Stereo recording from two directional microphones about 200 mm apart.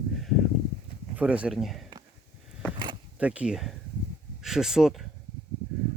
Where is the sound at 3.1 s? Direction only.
5° right (ahead or behind).